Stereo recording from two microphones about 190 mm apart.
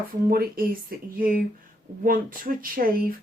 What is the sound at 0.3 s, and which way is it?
Speech, 50° right (ahead or behind).